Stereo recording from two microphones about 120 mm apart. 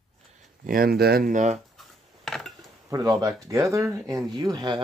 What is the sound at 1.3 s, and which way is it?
Speech, 90° right.